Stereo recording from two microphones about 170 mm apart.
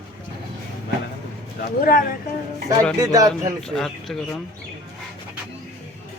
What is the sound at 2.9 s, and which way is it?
Speech, 20° right (ahead or behind).